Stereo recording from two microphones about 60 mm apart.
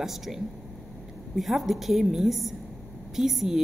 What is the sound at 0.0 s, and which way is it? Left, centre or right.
A woman's voice, centre.